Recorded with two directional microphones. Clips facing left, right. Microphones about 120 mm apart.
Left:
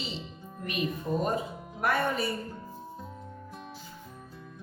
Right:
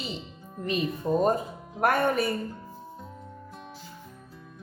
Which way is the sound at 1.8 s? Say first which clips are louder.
Right 4 dB; 50° right (ahead or behind).